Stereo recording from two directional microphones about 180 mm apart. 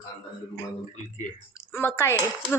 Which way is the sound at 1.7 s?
15° left (ahead or behind).